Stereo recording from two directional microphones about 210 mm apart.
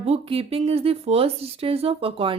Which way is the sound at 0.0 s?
30° right (ahead or behind).